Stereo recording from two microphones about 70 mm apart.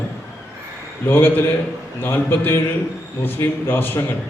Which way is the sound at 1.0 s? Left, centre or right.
Left.